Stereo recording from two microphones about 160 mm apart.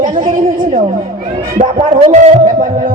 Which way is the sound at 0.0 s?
60° right (ahead or behind).